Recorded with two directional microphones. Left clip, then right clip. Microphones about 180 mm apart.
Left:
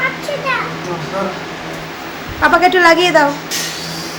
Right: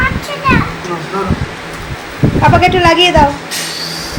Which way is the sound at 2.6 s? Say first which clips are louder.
Even; 5° right (ahead or behind).